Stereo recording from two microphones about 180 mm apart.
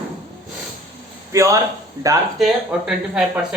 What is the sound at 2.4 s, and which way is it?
Speech, 5° right (ahead or behind).